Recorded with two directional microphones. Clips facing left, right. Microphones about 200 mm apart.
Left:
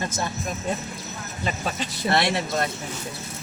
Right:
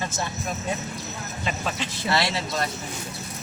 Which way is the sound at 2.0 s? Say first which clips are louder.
Left 3 dB; 55° left (ahead or behind).